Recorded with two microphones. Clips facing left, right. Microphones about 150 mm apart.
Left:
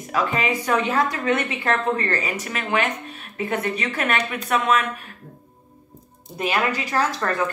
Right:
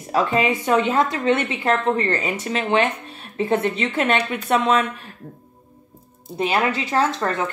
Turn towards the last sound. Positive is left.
turn(degrees=-25)  # may be behind; listen again after turning